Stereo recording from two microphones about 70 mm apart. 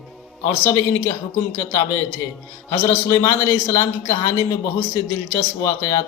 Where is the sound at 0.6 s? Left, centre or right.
Left.